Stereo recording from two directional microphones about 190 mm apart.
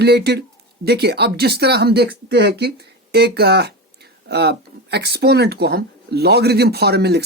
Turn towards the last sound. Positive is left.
turn(degrees=-60)  # may be behind; listen again after turning